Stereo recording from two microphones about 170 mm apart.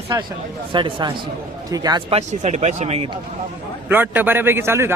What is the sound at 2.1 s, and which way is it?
Speech, 40° right (ahead or behind).